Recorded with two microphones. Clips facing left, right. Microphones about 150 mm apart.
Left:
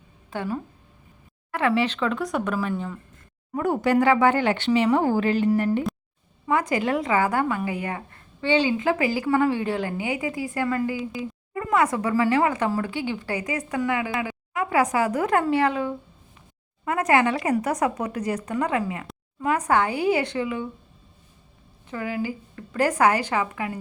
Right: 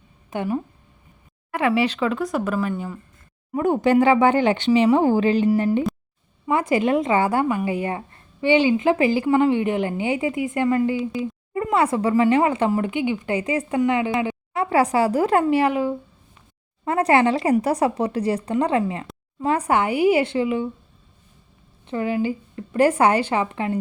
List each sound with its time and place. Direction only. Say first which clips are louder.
0.3 s a woman's voice: right 4 dB; 15° right (ahead or behind)
3.5 s speech: right 4 dB; 20° right (ahead or behind)
16.8 s speech: right 3 dB; 30° right (ahead or behind)
21.8 s speech: right 6 dB; 25° right (ahead or behind)